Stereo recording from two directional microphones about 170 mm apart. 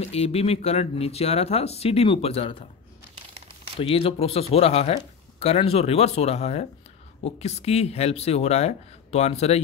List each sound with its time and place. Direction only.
0.0 s speech: 35° left (ahead or behind)
3.8 s speech: 35° left (ahead or behind)